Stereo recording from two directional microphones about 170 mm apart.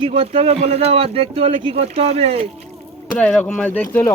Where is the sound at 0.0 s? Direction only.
30° right (ahead or behind).